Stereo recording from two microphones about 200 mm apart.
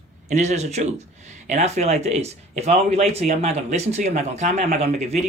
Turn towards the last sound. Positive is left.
turn(degrees=-35)  # may be behind; listen again after turning